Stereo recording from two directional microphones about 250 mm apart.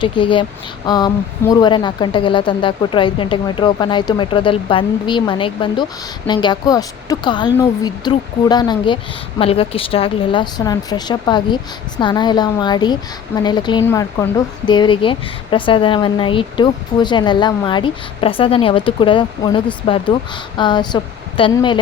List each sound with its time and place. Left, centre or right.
0.0 s speech: centre